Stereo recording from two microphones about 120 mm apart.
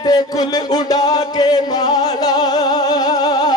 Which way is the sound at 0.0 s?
35° left (ahead or behind).